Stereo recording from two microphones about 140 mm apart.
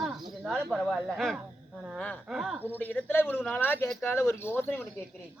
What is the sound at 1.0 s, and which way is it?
Speech, centre (ahead or behind).